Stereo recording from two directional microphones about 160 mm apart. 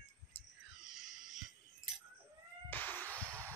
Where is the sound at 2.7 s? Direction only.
10° left (ahead or behind).